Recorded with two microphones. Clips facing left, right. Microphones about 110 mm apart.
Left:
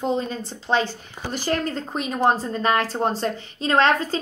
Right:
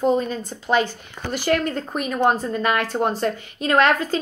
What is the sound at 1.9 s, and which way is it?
Speech, 55° right (ahead or behind).